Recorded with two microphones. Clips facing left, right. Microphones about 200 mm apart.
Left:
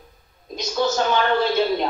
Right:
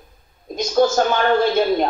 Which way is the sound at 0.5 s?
50° right (ahead or behind).